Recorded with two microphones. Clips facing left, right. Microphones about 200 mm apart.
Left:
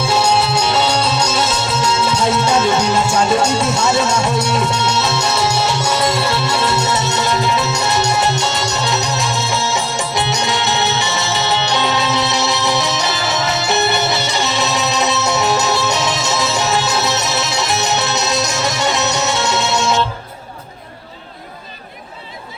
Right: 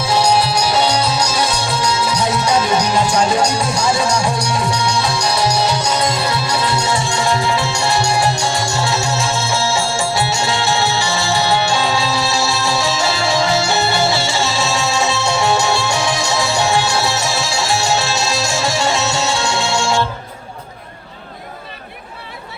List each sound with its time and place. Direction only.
0.0 s music: 25° left (ahead or behind)